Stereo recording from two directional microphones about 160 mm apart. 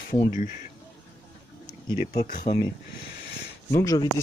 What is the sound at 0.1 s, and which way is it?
Speech, 55° left (ahead or behind).